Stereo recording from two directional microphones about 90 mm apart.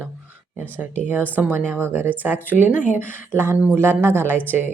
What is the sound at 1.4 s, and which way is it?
Speech, 25° right (ahead or behind).